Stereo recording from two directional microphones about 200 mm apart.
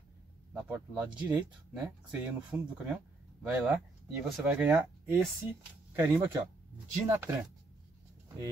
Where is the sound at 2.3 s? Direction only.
5° right (ahead or behind).